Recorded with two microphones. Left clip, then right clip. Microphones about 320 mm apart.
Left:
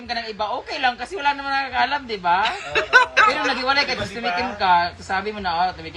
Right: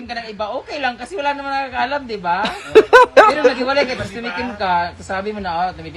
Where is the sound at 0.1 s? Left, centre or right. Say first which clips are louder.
Right 1 dB; centre.